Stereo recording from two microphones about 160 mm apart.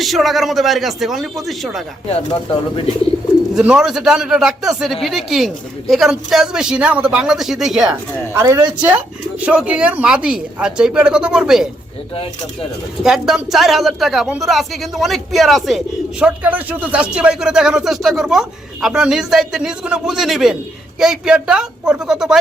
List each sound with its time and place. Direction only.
0.0 s speech: centre (ahead or behind)
2.0 s speech: 35° left (ahead or behind)
3.5 s speech: 5° right (ahead or behind)
13.0 s speech: centre (ahead or behind)